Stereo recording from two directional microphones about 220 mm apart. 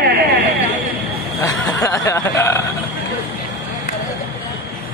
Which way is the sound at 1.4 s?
15° left (ahead or behind).